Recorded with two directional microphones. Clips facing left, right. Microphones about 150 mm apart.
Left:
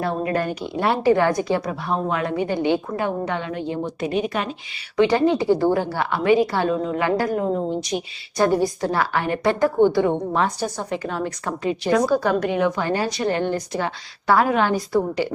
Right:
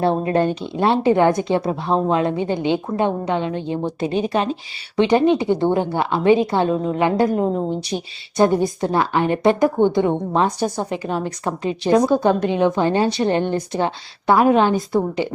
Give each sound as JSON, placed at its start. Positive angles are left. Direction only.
{"t": 0.0, "sound": "a woman's voice", "side_deg": -30}